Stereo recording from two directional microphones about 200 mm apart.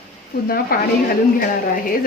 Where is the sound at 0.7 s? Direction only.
45° left (ahead or behind).